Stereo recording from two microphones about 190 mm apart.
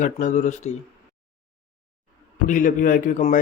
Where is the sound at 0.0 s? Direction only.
40° left (ahead or behind).